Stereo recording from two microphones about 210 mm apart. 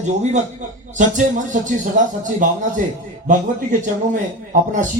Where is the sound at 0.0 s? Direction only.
35° right (ahead or behind).